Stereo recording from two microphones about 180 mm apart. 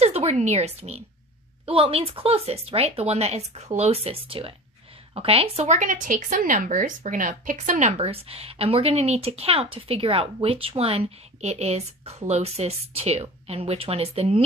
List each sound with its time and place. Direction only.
0.0 s speech: 35° right (ahead or behind)